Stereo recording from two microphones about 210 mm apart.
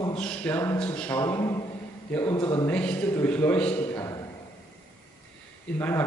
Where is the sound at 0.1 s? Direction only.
5° left (ahead or behind).